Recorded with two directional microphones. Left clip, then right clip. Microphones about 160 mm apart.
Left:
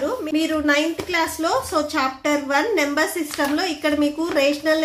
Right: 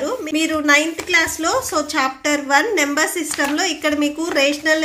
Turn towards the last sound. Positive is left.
turn(degrees=-15)  # may be behind; listen again after turning